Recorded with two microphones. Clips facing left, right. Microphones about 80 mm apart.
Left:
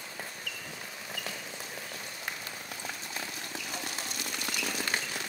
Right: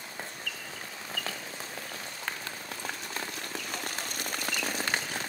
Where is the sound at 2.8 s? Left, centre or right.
Right.